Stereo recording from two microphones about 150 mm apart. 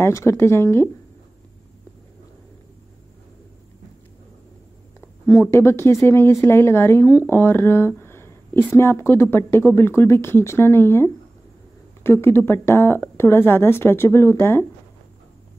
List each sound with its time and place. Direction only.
0.0 s speech: 15° left (ahead or behind)
5.2 s speech: 20° left (ahead or behind)